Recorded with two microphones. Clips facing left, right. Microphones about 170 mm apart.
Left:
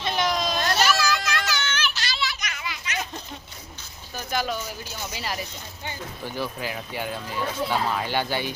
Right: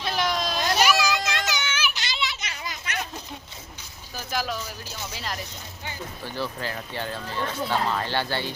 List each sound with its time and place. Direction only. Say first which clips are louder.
0.0 s a sound: left 1 dB; centre (ahead or behind)
0.6 s children playing: right 3 dB; 15° right (ahead or behind); by 2.7 s 35° right (ahead or behind)
4.2 s speech: left 2 dB; centre (ahead or behind)
5.8 s speech: left 2 dB; 15° left (ahead or behind)